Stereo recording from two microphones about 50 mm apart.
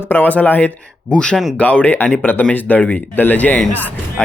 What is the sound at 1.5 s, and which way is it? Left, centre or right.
Speech, left.